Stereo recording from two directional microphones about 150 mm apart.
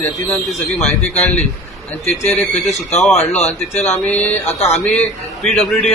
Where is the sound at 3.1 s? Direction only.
45° left (ahead or behind).